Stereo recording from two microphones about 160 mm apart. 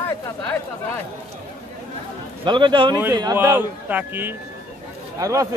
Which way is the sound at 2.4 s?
30° right (ahead or behind).